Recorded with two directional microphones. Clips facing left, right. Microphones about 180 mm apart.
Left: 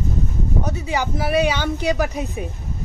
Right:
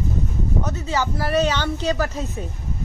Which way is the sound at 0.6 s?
15° left (ahead or behind).